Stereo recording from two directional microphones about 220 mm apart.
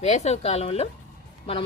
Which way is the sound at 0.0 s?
30° left (ahead or behind).